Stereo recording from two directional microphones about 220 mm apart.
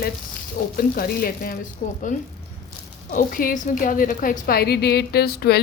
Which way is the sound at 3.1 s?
40° left (ahead or behind).